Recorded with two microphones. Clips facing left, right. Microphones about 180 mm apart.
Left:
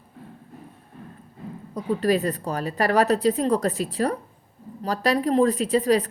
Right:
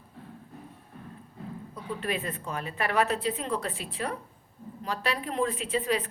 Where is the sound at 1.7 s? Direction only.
40° left (ahead or behind).